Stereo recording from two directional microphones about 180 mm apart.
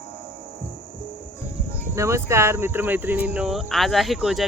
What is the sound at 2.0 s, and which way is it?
Speech, 15° right (ahead or behind).